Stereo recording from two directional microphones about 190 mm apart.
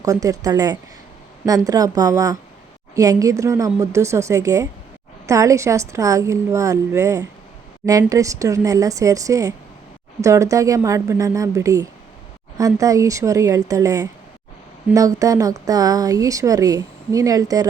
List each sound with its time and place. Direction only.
0.0 s a woman's voice: 20° right (ahead or behind)